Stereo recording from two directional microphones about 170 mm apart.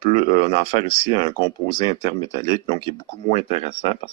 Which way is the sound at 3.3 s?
40° left (ahead or behind).